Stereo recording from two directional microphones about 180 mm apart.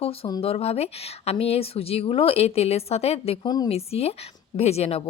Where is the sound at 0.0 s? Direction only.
35° left (ahead or behind).